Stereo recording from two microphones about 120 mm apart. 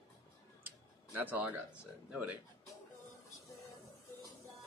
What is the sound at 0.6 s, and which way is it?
Speech, 15° right (ahead or behind).